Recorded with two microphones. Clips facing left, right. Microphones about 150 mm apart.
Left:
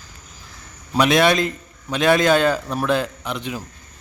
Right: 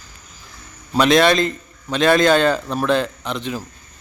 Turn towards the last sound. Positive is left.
turn(degrees=10)  # may be behind; listen again after turning